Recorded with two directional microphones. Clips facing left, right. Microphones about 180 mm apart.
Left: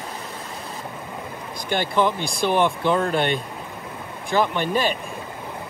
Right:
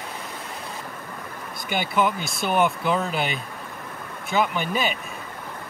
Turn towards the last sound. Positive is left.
turn(degrees=-5)  # may be behind; listen again after turning